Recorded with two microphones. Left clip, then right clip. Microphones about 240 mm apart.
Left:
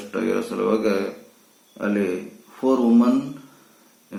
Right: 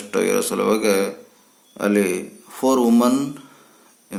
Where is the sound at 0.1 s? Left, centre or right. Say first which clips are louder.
Right 5 dB; right.